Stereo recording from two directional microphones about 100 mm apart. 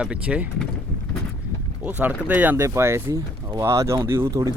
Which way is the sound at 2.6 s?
30° right (ahead or behind).